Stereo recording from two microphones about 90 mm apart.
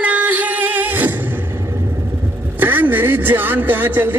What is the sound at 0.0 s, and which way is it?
Music, 15° right (ahead or behind).